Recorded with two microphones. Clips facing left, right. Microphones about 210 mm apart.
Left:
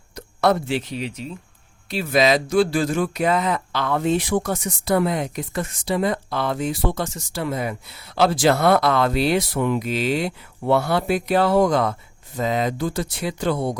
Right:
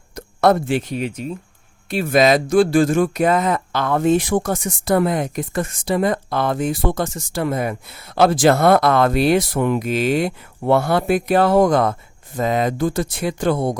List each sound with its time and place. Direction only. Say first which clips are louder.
0.1 s speech: right 4 dB; 50° right (ahead or behind)